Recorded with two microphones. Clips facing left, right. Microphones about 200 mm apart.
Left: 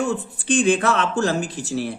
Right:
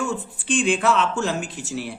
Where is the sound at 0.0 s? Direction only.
40° left (ahead or behind).